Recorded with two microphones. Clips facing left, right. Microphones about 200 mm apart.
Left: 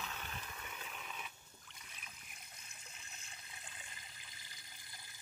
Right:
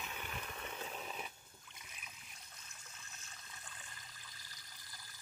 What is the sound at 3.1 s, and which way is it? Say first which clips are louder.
Water: even; 15° left (ahead or behind).